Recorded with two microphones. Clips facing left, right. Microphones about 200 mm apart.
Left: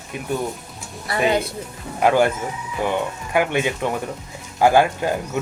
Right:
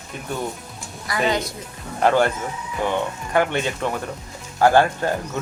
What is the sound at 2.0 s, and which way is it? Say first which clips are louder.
Speech: left 1 dB; 10° left (ahead or behind).